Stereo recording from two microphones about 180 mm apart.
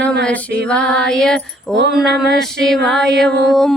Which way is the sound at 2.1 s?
70° right (ahead or behind).